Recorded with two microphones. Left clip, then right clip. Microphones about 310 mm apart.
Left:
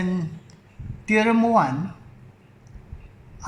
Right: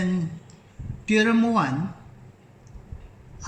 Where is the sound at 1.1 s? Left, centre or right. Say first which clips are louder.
Left 2 dB; left.